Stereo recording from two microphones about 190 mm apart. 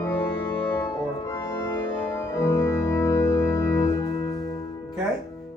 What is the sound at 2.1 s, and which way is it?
Organ, 15° left (ahead or behind).